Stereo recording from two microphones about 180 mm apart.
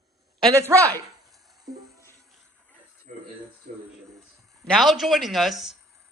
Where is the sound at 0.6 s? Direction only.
15° right (ahead or behind).